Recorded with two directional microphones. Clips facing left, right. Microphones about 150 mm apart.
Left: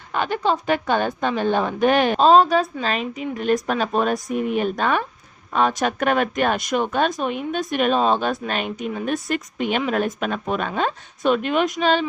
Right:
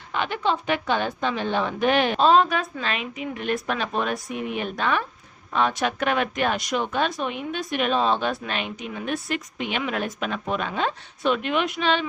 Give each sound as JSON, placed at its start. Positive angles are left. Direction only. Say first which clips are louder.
{"t": 0.1, "sound": "speech", "louder": "left 3 dB", "side_deg": 45}